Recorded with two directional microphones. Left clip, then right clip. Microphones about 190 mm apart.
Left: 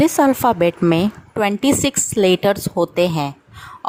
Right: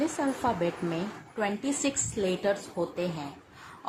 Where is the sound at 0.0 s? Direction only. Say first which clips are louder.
Left 14 dB; 50° left (ahead or behind).